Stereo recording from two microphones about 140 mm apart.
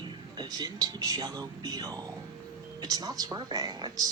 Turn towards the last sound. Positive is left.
turn(degrees=-30)  # may be behind; listen again after turning